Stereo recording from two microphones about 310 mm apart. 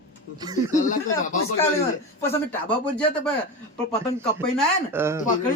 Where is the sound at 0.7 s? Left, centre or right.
Left.